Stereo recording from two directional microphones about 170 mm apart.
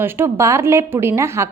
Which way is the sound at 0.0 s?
15° right (ahead or behind).